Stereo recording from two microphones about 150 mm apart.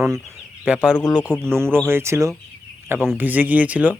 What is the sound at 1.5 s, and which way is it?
Speech, 15° right (ahead or behind).